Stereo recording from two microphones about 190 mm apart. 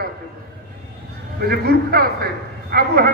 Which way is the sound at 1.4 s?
55° right (ahead or behind).